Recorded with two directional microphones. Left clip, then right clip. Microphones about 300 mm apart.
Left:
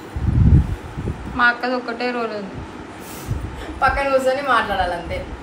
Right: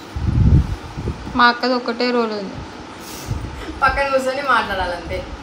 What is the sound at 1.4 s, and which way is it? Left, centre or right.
A man's voice, right.